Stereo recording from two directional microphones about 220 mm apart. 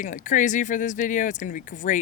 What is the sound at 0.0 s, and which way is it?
Speech, 35° left (ahead or behind).